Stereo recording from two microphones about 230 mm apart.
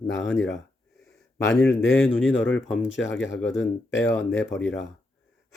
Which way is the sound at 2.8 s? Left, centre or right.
Left.